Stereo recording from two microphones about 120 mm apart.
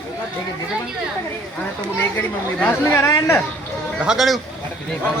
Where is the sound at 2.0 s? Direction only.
15° left (ahead or behind).